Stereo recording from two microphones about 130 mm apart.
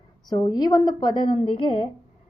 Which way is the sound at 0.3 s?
30° left (ahead or behind).